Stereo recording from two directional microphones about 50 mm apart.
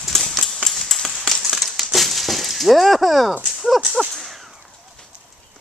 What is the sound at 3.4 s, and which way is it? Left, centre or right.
Speech, centre.